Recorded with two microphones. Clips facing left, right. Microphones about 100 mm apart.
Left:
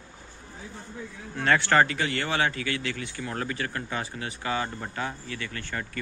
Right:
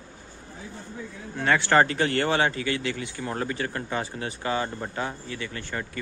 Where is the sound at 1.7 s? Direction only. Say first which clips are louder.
Right 2 dB; 35° right (ahead or behind).